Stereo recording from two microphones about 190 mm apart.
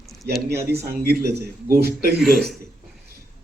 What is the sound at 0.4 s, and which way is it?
Speech, 55° right (ahead or behind).